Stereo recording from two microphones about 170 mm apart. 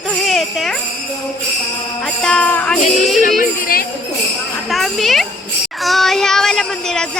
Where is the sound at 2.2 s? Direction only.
5° left (ahead or behind).